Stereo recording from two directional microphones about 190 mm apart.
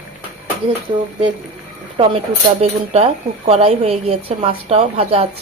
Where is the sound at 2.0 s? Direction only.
30° right (ahead or behind).